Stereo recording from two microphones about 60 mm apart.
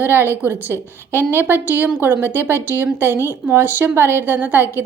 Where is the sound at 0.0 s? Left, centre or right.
Right.